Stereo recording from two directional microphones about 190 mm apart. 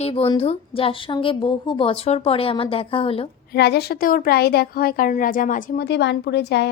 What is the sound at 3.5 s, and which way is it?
A woman's voice, 60° left (ahead or behind).